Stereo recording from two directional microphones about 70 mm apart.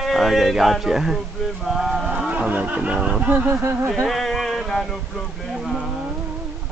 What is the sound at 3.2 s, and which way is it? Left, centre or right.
Speech, right.